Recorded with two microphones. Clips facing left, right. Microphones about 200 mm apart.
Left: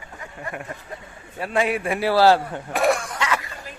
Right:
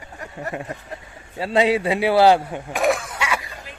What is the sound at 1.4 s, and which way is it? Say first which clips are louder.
Speech: right 4 dB; 20° right (ahead or behind).